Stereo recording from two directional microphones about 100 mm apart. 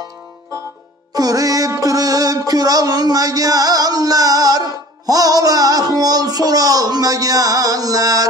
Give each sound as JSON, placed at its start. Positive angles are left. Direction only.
{"t": 1.1, "sound": "music", "side_deg": -35}